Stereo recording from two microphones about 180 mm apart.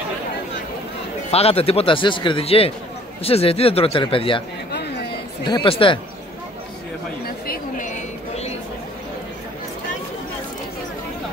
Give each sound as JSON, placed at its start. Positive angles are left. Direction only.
{"t": 1.3, "sound": "speech", "side_deg": 35}
{"t": 5.4, "sound": "speech", "side_deg": 25}
{"t": 7.2, "sound": "speech", "side_deg": 55}